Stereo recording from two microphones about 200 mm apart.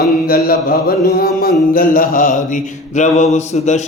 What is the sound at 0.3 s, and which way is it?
Mantra, 50° left (ahead or behind).